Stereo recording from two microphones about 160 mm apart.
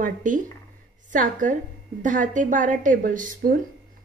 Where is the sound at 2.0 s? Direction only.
55° right (ahead or behind).